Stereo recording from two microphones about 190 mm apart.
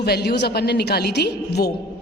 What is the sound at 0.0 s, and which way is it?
A woman's voice, 55° left (ahead or behind).